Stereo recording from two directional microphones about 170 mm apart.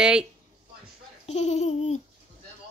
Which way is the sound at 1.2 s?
40° left (ahead or behind).